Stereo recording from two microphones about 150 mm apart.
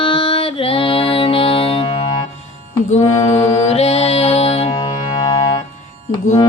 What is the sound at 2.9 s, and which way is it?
Mantra, 45° left (ahead or behind).